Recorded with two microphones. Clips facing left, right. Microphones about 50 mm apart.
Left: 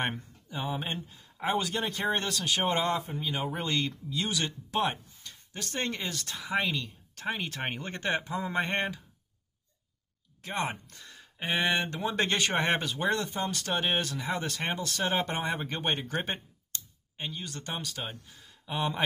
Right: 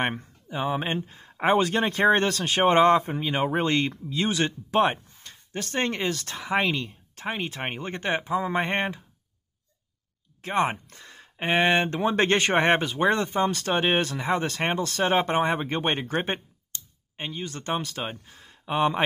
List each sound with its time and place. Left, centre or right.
0.5 s speech: right
7.2 s speech: right
10.4 s speech: right